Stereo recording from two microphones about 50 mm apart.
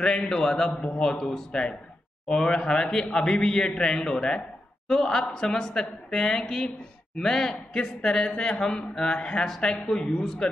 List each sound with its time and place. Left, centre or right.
0.0 s speech: centre